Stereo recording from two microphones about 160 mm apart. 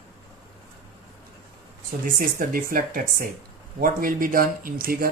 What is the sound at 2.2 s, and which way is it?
Speech, 60° right (ahead or behind).